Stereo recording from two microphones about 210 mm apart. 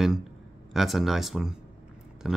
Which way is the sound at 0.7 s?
Centre (ahead or behind).